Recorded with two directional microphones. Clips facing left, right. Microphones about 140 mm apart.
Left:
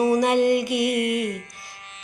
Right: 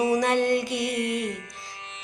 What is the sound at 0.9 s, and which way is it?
Music, 55° left (ahead or behind).